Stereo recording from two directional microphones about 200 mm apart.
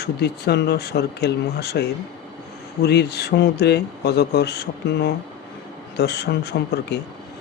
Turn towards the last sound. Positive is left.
turn(degrees=55)  # may be behind; listen again after turning